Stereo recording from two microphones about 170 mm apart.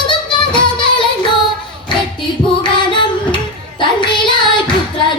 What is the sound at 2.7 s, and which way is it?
Child singing, 30° left (ahead or behind).